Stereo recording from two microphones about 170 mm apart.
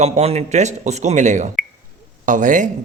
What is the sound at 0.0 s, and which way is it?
A man's voice, 40° right (ahead or behind).